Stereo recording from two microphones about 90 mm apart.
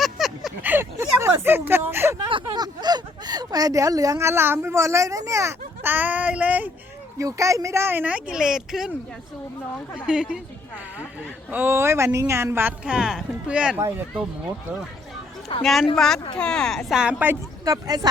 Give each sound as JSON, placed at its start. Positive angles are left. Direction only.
{"t": 0.0, "sound": "a sound", "side_deg": -5}
{"t": 0.6, "sound": "a sound", "side_deg": -25}
{"t": 2.3, "sound": "speech", "side_deg": -50}
{"t": 7.2, "sound": "speech", "side_deg": -35}
{"t": 10.1, "sound": "speech", "side_deg": -10}
{"t": 11.5, "sound": "speech", "side_deg": -25}
{"t": 12.8, "sound": "speech", "side_deg": -10}
{"t": 15.6, "sound": "speech", "side_deg": 0}
{"t": 16.9, "sound": "speech", "side_deg": -10}
{"t": 17.7, "sound": "speech", "side_deg": -45}